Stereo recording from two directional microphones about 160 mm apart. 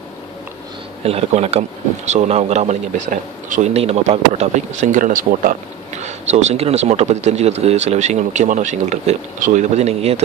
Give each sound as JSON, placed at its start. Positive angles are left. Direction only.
{"t": 1.0, "sound": "speech", "side_deg": -40}